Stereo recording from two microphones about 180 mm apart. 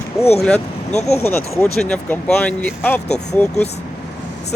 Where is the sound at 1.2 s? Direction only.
5° left (ahead or behind).